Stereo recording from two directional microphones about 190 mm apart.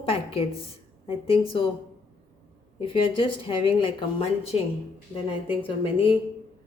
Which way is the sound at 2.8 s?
25° left (ahead or behind).